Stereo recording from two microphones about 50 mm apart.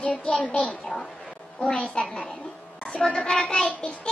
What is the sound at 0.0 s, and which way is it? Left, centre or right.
A woman's voice, left.